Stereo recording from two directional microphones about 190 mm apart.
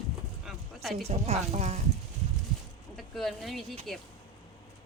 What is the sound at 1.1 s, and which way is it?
Speech, 35° right (ahead or behind).